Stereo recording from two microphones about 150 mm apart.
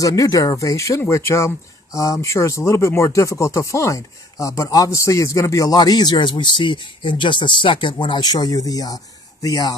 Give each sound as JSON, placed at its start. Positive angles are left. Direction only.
{"t": 0.0, "sound": "speech", "side_deg": 25}